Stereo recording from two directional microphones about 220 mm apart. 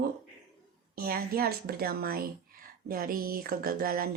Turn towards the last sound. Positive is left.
turn(degrees=-40)  # may be behind; listen again after turning